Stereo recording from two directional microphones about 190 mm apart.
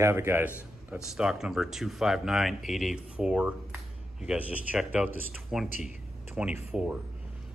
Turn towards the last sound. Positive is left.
turn(degrees=-5)  # may be behind; listen again after turning